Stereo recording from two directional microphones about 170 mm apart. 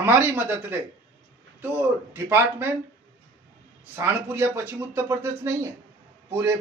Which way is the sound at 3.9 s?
15° right (ahead or behind).